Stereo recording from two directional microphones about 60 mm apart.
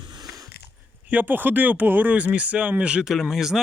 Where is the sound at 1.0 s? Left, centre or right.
Right.